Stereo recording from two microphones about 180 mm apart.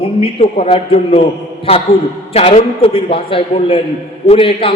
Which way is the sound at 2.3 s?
35° left (ahead or behind).